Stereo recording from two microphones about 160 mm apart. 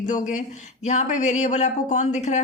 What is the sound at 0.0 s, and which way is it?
A woman's voice, 50° left (ahead or behind).